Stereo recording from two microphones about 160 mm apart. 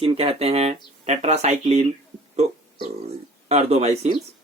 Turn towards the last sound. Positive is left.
turn(degrees=-45)  # may be behind; listen again after turning